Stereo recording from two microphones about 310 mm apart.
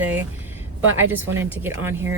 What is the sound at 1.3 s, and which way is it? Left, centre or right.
Speech, centre.